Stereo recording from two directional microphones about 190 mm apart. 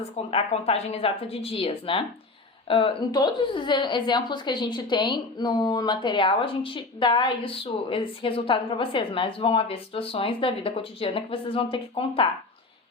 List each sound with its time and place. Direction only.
0.3 s a woman's voice: 30° left (ahead or behind)